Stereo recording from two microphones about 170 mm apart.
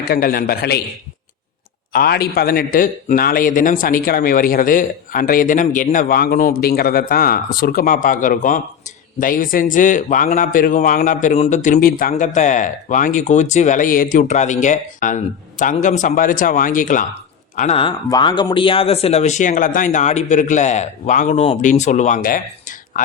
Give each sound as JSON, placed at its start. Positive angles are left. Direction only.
{"t": 0.0, "sound": "a man's voice", "side_deg": 60}
{"t": 1.9, "sound": "a man's voice", "side_deg": 65}
{"t": 18.1, "sound": "a man's voice", "side_deg": 25}